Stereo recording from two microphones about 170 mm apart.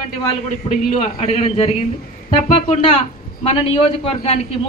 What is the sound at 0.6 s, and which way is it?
A man's voice, 40° left (ahead or behind).